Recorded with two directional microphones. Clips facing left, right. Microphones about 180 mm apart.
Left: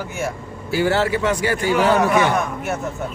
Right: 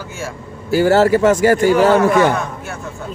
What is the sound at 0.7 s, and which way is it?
A man's voice, 45° right (ahead or behind).